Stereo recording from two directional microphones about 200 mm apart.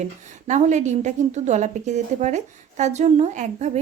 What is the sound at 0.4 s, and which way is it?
A woman's voice, 35° right (ahead or behind).